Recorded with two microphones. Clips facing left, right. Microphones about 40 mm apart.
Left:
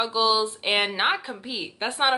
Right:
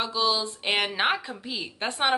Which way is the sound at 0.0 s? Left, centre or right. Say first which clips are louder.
Left 4 dB; centre.